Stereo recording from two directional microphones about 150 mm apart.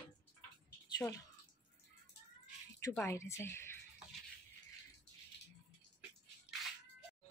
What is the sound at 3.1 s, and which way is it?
Speech, 20° left (ahead or behind).